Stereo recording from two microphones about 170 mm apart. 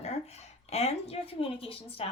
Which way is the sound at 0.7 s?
40° left (ahead or behind).